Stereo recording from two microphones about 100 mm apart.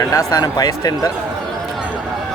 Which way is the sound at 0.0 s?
35° left (ahead or behind).